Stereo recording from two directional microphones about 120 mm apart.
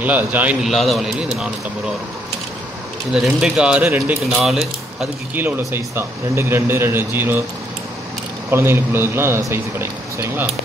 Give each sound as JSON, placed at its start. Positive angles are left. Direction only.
{"t": 0.0, "sound": "a man's voice", "side_deg": -10}
{"t": 0.7, "sound": "speech", "side_deg": 0}
{"t": 3.1, "sound": "speech", "side_deg": -5}
{"t": 5.3, "sound": "a man's voice", "side_deg": -15}
{"t": 8.5, "sound": "a man's voice", "side_deg": -20}